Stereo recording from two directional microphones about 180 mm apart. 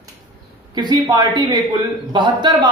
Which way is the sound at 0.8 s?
25° right (ahead or behind).